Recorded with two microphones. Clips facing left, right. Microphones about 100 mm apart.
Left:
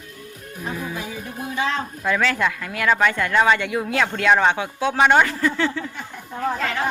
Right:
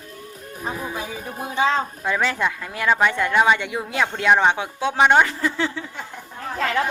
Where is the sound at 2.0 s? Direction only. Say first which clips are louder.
Left 4 dB; 20° right (ahead or behind).